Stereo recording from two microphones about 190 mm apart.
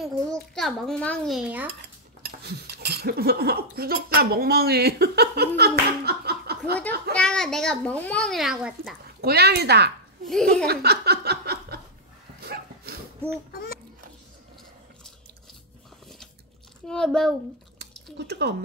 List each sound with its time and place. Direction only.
0.0 s a child's voice: centre (ahead or behind)
2.4 s speech: 60° right (ahead or behind)
7.2 s a child's voice: 5° left (ahead or behind)
9.2 s speech: 55° right (ahead or behind)
10.2 s a child's voice: centre (ahead or behind)
10.7 s a sound: 55° right (ahead or behind)
12.4 s dog: 60° right (ahead or behind)
13.5 s babbling: 55° left (ahead or behind)
16.8 s a child's voice: 5° left (ahead or behind)
18.1 s speech: 60° right (ahead or behind)